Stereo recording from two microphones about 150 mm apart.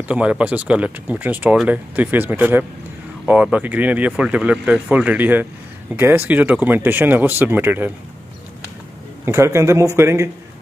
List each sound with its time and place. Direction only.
0.1 s speech: 10° right (ahead or behind)
9.2 s speech: 20° right (ahead or behind)